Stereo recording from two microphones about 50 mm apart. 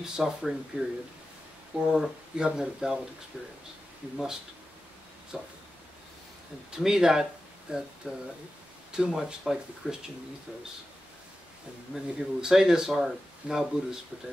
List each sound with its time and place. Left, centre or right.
0.0 s speech: centre
5.3 s speech: centre
6.8 s speech: centre
11.9 s speech: centre